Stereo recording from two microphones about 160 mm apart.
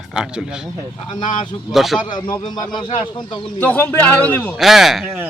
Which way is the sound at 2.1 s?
30° left (ahead or behind).